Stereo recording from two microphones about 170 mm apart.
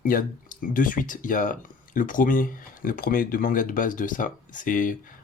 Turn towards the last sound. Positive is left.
turn(degrees=50)  # may be behind; listen again after turning